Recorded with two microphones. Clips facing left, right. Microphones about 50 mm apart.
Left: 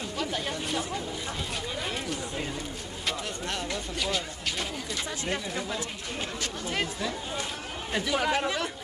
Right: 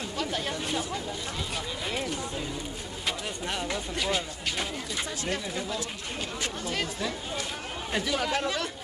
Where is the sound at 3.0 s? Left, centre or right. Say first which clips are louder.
Even; centre.